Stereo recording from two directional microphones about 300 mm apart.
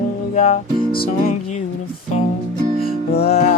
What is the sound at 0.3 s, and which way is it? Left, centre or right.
Music, left.